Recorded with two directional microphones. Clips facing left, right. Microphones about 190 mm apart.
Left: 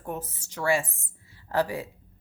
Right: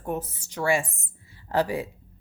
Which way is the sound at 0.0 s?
15° right (ahead or behind).